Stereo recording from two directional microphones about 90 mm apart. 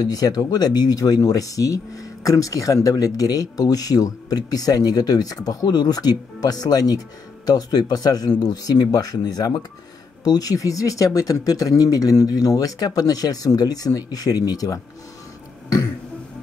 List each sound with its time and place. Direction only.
0.0 s speech: 45° left (ahead or behind)